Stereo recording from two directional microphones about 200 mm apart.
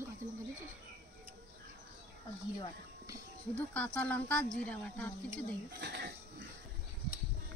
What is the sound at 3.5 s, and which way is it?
Speech, 5° left (ahead or behind).